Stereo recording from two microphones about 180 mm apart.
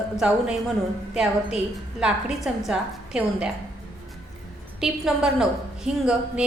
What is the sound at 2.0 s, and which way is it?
A woman's voice, 5° right (ahead or behind).